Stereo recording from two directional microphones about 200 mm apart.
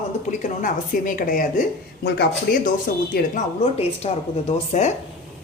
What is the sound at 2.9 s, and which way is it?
Speech, 45° left (ahead or behind).